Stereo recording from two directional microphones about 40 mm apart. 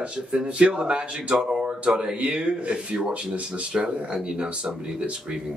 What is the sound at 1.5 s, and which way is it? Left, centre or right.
Speech, centre.